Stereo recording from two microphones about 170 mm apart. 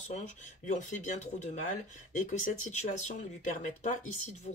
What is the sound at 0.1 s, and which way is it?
Speech, 45° left (ahead or behind).